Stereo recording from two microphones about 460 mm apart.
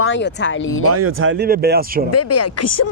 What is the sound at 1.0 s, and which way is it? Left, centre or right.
Speech, right.